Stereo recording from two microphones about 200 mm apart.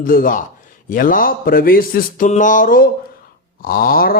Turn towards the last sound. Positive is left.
turn(degrees=45)  # may be behind; listen again after turning